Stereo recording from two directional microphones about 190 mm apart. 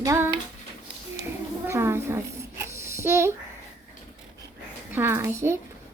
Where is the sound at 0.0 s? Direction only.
15° right (ahead or behind).